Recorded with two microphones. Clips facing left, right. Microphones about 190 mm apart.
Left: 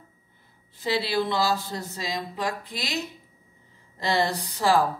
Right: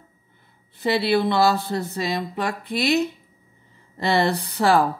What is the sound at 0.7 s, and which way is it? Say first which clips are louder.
Speech: right 5 dB; 60° right (ahead or behind).